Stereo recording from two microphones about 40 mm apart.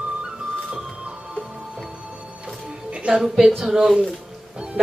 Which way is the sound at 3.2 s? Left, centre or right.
Centre.